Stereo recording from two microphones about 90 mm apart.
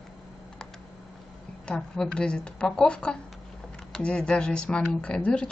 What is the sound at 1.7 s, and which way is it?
Speech, 10° left (ahead or behind).